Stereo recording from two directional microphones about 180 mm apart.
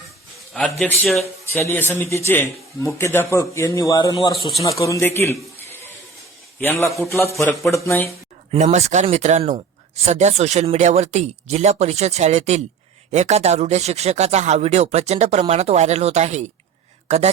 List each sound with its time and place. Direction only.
0.5 s a man's voice: 5° left (ahead or behind)
6.6 s a man's voice: 10° left (ahead or behind)
8.5 s speech: 40° right (ahead or behind)